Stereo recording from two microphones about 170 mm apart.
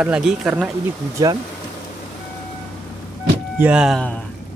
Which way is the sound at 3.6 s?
5° right (ahead or behind).